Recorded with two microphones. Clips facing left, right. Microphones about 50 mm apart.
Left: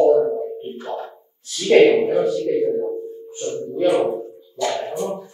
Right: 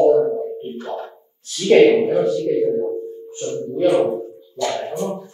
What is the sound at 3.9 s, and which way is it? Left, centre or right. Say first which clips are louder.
Speech: right 2 dB; left.